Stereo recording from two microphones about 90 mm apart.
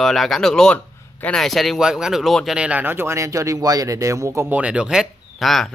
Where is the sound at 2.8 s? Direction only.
25° right (ahead or behind).